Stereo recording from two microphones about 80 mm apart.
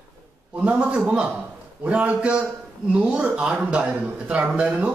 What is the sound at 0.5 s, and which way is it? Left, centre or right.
A man's voice, centre.